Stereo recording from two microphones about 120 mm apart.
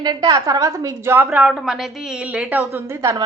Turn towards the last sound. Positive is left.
turn(degrees=-25)  # may be behind; listen again after turning